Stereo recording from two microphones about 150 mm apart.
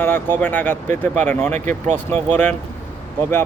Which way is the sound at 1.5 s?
50° right (ahead or behind).